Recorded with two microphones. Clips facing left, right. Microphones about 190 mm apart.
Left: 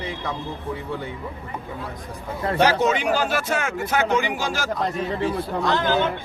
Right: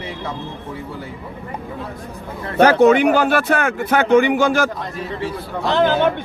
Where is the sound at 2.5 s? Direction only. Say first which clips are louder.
Right 9 dB; 55° right (ahead or behind).